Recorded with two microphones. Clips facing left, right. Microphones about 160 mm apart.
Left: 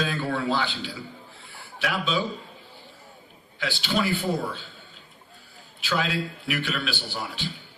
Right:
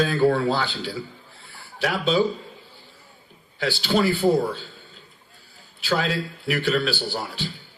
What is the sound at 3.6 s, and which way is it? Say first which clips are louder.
A man's voice: right 5 dB; 35° right (ahead or behind).